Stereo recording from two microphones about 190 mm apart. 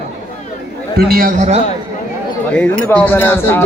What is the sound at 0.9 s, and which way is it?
Speech, 50° right (ahead or behind).